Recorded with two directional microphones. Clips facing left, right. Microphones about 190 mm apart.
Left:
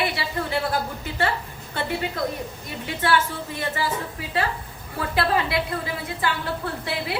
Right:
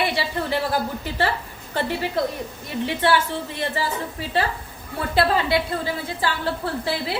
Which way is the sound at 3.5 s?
25° right (ahead or behind).